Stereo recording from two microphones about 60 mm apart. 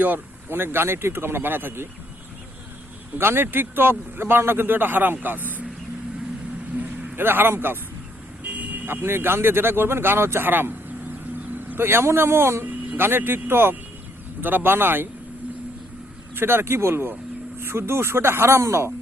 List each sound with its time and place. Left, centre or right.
0.0 s a man's voice: right
3.2 s a man's voice: right
6.7 s a man's voice: right
8.4 s vehicle: right
8.9 s a man's voice: right
12.6 s a man's voice: right
16.3 s a man's voice: right